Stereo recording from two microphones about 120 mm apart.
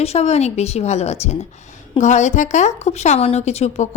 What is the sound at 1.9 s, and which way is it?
A woman's voice, 80° left.